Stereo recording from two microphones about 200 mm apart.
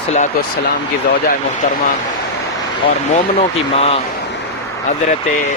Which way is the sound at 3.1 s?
30° left (ahead or behind).